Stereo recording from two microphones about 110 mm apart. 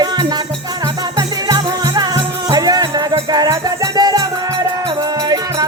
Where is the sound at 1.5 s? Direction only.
35° right (ahead or behind).